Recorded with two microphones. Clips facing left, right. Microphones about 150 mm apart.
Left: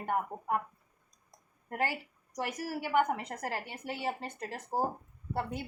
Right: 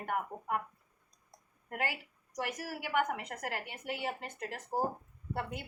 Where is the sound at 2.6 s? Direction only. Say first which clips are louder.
Left 5 dB; 30° left (ahead or behind).